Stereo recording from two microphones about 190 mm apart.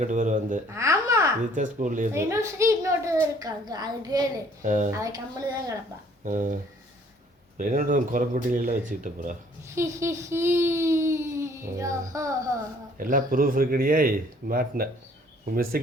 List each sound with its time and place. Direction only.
0.0 s speech: 40° right (ahead or behind)
0.7 s babbling: 15° right (ahead or behind)
1.5 s speech: 45° right (ahead or behind)
2.1 s a woman's voice: 15° right (ahead or behind)
4.6 s speech: 40° right (ahead or behind)
4.9 s a child's voice: 15° right (ahead or behind)
6.2 s speech: 40° right (ahead or behind)
7.6 s speech: 45° right (ahead or behind)
9.6 s a child's voice: 15° right (ahead or behind)
13.0 s speech: 45° right (ahead or behind)